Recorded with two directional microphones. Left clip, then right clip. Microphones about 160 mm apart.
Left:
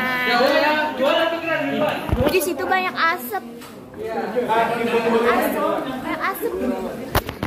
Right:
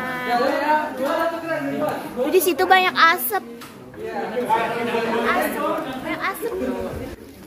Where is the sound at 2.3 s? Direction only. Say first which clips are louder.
Right 6 dB; 60° right (ahead or behind).